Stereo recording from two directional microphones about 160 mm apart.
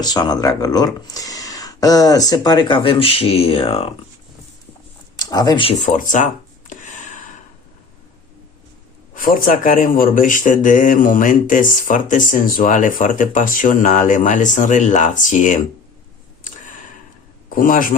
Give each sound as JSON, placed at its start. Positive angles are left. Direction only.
{"t": 0.0, "sound": "speech", "side_deg": 25}
{"t": 5.1, "sound": "speech", "side_deg": 25}
{"t": 5.8, "sound": "a sound", "side_deg": 55}
{"t": 9.1, "sound": "speech", "side_deg": 60}
{"t": 17.5, "sound": "a man's voice", "side_deg": 60}